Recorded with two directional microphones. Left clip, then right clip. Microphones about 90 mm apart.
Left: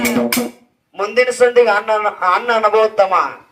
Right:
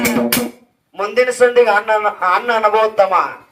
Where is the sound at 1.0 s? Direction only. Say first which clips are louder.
Even; 35° left (ahead or behind).